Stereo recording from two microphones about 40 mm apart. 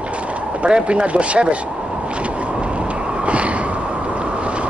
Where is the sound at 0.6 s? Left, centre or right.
Right.